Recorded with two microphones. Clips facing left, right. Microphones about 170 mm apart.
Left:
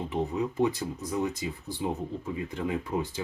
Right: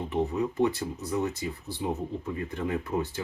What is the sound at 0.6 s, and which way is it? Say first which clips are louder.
Speech: even; 15° left (ahead or behind).